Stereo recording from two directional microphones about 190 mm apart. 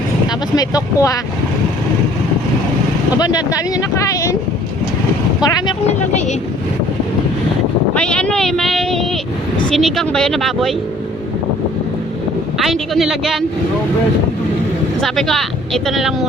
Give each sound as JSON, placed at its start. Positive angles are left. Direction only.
{"t": 0.3, "sound": "speech", "side_deg": 20}
{"t": 3.2, "sound": "speech", "side_deg": 20}
{"t": 5.4, "sound": "speech", "side_deg": 20}
{"t": 5.9, "sound": "speech", "side_deg": 35}
{"t": 7.9, "sound": "vehicle", "side_deg": 5}
{"t": 9.6, "sound": "speech", "side_deg": 0}
{"t": 12.5, "sound": "speech", "side_deg": 0}
{"t": 15.0, "sound": "speech", "side_deg": 0}